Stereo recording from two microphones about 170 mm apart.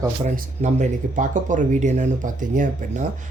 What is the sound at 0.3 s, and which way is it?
Speech, 45° right (ahead or behind).